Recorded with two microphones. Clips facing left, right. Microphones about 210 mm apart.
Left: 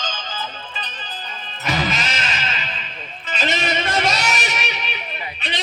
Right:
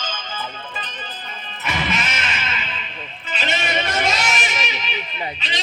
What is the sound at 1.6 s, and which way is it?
Music, 35° left (ahead or behind).